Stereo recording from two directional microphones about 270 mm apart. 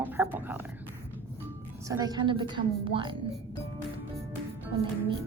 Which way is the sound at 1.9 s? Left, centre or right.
Centre.